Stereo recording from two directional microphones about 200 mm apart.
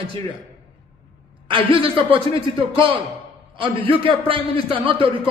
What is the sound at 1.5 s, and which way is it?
A man's voice, 25° right (ahead or behind).